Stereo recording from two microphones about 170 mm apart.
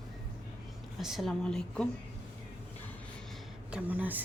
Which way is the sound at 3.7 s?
10° right (ahead or behind).